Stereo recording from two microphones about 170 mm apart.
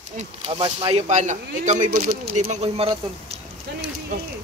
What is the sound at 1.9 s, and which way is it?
Speech, 55° right (ahead or behind).